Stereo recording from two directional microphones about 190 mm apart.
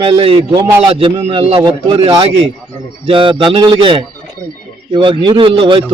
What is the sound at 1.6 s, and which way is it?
A man's voice, 20° right (ahead or behind).